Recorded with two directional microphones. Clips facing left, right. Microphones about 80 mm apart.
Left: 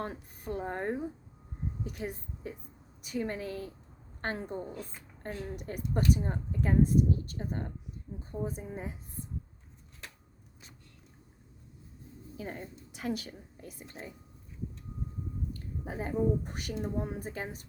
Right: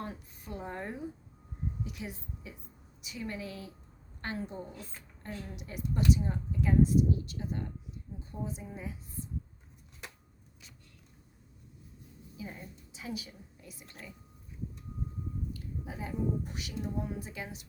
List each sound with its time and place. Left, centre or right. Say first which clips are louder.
0.0 s a woman's voice: left 4 dB; left
12.4 s a woman's voice: left 4 dB; left
13.8 s a woman's voice: left 5 dB; left
15.5 s a woman's voice: left 3 dB; left